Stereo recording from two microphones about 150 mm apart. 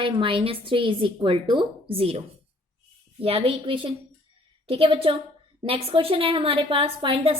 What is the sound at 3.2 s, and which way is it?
A woman's voice, 40° right (ahead or behind).